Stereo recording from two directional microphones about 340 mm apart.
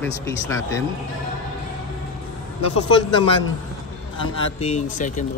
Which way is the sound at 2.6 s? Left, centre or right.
Left.